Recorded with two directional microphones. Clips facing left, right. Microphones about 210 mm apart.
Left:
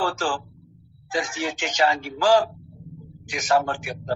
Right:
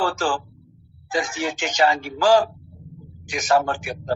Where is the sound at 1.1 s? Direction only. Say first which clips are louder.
Right 2 dB; 45° right (ahead or behind).